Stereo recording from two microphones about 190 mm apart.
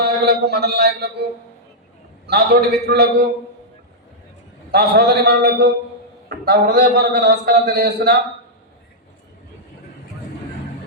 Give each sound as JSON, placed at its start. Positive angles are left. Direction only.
{"t": 0.0, "sound": "mantra", "side_deg": -55}
{"t": 2.2, "sound": "a man's voice", "side_deg": -55}
{"t": 4.7, "sound": "a man's voice", "side_deg": -55}